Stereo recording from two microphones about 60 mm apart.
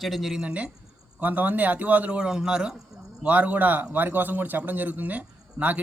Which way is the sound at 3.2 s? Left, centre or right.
Right.